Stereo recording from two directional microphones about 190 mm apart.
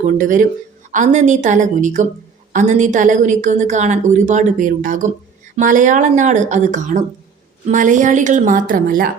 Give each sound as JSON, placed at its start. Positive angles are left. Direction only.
{"t": 0.0, "sound": "a woman's voice", "side_deg": -45}